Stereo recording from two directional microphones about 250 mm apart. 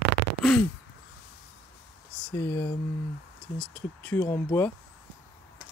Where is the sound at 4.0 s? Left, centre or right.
Centre.